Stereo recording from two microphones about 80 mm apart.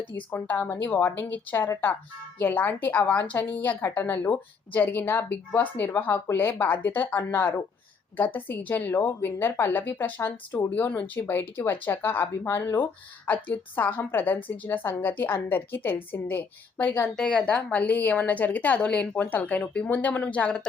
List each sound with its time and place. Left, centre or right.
0.3 s a woman's voice: left